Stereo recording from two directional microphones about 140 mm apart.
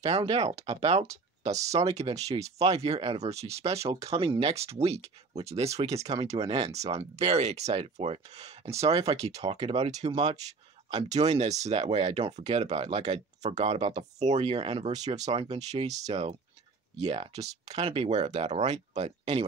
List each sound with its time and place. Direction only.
0.2 s speech: 35° right (ahead or behind)
0.5 s speech: 50° right (ahead or behind)
2.0 s speech: 25° right (ahead or behind)
2.6 s speech: 50° right (ahead or behind)
6.0 s speech: 25° right (ahead or behind)
6.4 s speech: 45° right (ahead or behind)
10.9 s speech: 30° right (ahead or behind)
11.1 s speech: 50° right (ahead or behind)